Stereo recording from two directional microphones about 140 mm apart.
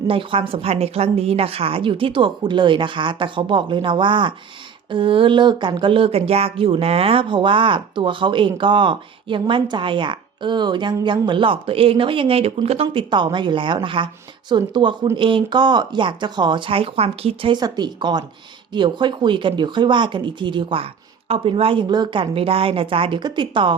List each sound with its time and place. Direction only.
0.1 s speech: 40° right (ahead or behind)